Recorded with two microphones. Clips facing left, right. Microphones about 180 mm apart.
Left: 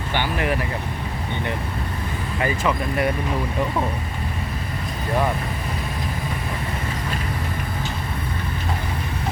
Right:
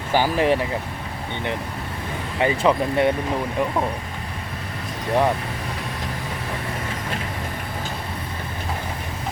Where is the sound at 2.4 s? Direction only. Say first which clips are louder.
Right 4 dB; 25° right (ahead or behind).